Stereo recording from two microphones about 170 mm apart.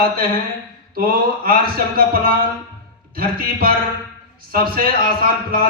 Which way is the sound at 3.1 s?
60° right (ahead or behind).